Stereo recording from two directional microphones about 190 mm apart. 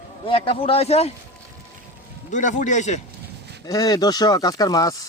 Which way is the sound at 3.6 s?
20° left (ahead or behind).